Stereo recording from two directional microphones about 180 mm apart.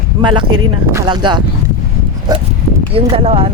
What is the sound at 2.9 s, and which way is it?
Speech, 30° right (ahead or behind).